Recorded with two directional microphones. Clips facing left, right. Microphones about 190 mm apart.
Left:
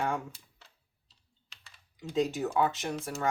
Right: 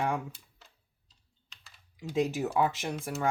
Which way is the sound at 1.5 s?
Centre (ahead or behind).